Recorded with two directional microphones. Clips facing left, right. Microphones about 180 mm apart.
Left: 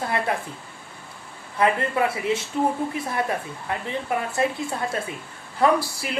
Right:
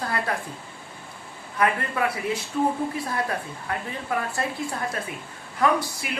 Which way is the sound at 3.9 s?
20° left (ahead or behind).